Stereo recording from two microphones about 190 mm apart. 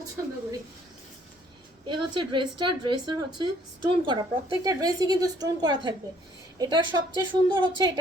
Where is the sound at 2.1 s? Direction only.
25° right (ahead or behind).